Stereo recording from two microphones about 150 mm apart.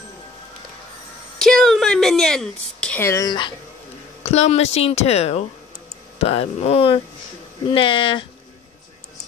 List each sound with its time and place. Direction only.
1.4 s a sound: 5° left (ahead or behind)
3.0 s speech: 20° left (ahead or behind)
4.2 s a woman's voice: 45° left (ahead or behind)